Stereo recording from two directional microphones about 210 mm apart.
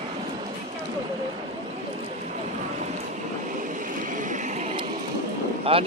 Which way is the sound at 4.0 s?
40° right (ahead or behind).